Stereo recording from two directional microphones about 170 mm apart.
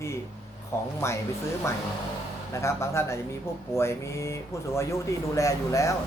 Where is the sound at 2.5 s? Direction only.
15° left (ahead or behind).